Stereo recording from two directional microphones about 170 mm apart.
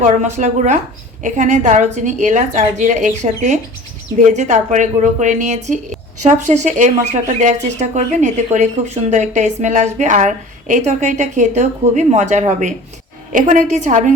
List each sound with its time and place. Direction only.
0.3 s speech: 45° right (ahead or behind)